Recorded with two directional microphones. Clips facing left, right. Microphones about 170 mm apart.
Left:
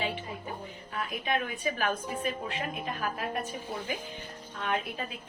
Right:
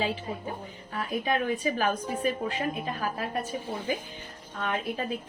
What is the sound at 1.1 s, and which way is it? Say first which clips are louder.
Speech: right 6 dB; 35° right (ahead or behind).